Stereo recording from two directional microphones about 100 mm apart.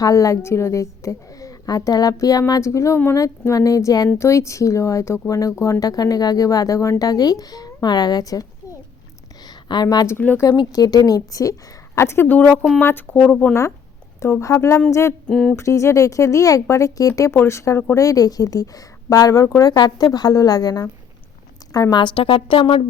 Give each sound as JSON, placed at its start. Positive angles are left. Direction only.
{"t": 0.0, "sound": "a woman's voice", "side_deg": 35}
{"t": 9.6, "sound": "speech", "side_deg": 45}
{"t": 10.1, "sound": "speech", "side_deg": 20}
{"t": 10.6, "sound": "a woman's voice", "side_deg": 40}
{"t": 11.9, "sound": "speech", "side_deg": 25}
{"t": 12.5, "sound": "speech", "side_deg": 0}
{"t": 12.8, "sound": "speech", "side_deg": 20}
{"t": 13.5, "sound": "speech", "side_deg": 25}
{"t": 15.3, "sound": "speech", "side_deg": 10}
{"t": 15.5, "sound": "a woman's voice", "side_deg": 30}